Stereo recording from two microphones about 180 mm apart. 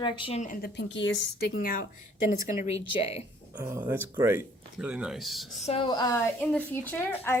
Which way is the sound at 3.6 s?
15° right (ahead or behind).